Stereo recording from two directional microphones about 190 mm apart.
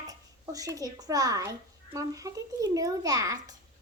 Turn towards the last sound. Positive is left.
turn(degrees=-20)  # may be behind; listen again after turning